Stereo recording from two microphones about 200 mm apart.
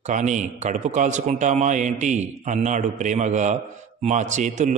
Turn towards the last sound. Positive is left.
turn(degrees=-35)  # may be behind; listen again after turning